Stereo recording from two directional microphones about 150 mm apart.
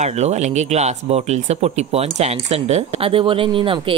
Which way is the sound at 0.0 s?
50° right (ahead or behind).